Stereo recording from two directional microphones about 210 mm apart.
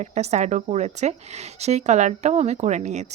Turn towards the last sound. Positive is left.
turn(degrees=-35)  # may be behind; listen again after turning